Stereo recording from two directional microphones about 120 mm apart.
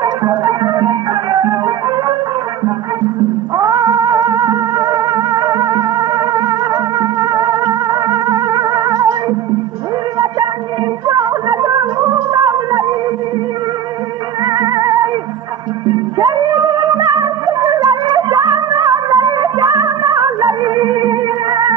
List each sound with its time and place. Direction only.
0.0 s music: 35° right (ahead or behind)
3.5 s music: 35° right (ahead or behind)
11.1 s a sound: 35° right (ahead or behind)
12.3 s music: 35° right (ahead or behind)
14.4 s music: 35° right (ahead or behind)